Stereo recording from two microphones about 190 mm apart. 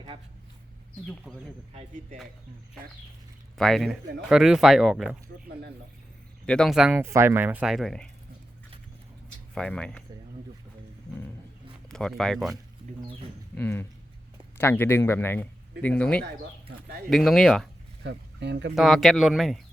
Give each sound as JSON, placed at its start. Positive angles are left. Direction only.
{"t": 1.0, "sound": "speech", "side_deg": 0}
{"t": 3.6, "sound": "speech", "side_deg": 0}
{"t": 6.4, "sound": "speech", "side_deg": 5}
{"t": 9.6, "sound": "speech", "side_deg": 5}
{"t": 11.9, "sound": "speech", "side_deg": 0}
{"t": 13.6, "sound": "speech", "side_deg": 10}
{"t": 16.2, "sound": "speech", "side_deg": -55}
{"t": 17.1, "sound": "speech", "side_deg": 0}
{"t": 18.0, "sound": "speech", "side_deg": -65}
{"t": 18.7, "sound": "speech", "side_deg": 0}